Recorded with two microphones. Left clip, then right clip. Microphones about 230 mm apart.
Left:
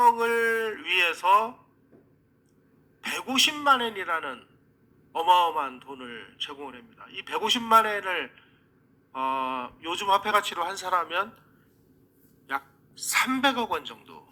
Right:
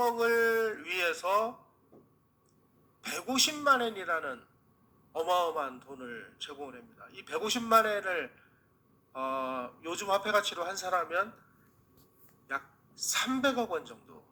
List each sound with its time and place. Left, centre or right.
0.2 s a sound: left
3.0 s a man's voice: left
13.1 s a man's voice: left